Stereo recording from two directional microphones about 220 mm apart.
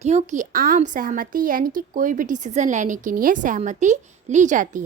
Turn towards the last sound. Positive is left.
turn(degrees=-35)  # may be behind; listen again after turning